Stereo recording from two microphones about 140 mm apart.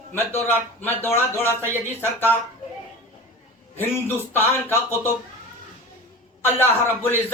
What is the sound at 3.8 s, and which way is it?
A man's voice, 15° left (ahead or behind).